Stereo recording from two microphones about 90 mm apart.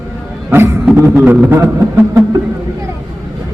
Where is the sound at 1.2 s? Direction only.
20° right (ahead or behind).